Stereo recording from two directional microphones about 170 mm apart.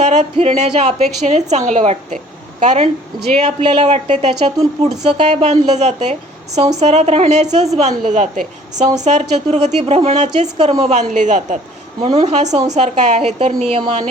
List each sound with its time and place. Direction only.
0.0 s a woman's voice: 40° right (ahead or behind)